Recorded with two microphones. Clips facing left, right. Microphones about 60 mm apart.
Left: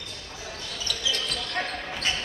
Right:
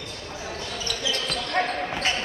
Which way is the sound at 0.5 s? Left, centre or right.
Right.